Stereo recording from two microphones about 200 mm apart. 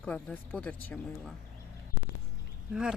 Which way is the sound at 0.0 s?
5° left (ahead or behind).